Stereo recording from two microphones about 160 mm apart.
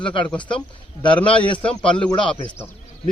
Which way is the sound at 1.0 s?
30° left (ahead or behind).